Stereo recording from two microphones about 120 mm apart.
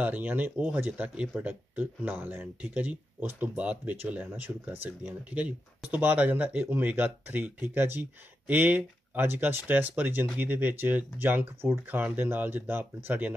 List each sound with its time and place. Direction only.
0.0 s speech: 15° right (ahead or behind)